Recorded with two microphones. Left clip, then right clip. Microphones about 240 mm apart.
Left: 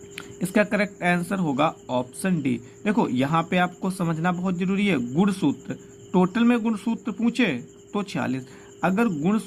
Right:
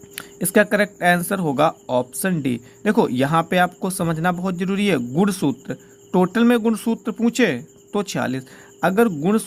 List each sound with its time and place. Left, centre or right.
0.2 s speech: right